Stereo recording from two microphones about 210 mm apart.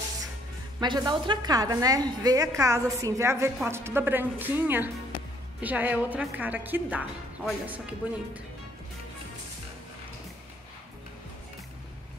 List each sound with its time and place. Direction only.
0.7 s a woman's voice: 20° right (ahead or behind)